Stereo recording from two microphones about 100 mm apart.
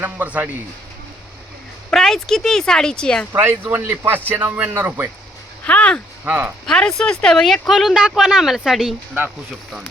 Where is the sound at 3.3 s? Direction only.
20° right (ahead or behind).